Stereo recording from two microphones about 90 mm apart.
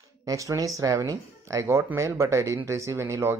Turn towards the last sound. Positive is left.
turn(degrees=-30)  # may be behind; listen again after turning